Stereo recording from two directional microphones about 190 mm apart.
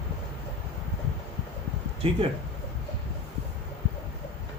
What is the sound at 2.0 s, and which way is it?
Speech, 30° right (ahead or behind).